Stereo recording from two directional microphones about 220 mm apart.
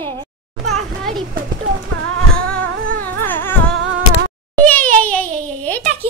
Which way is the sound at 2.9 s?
10° left (ahead or behind).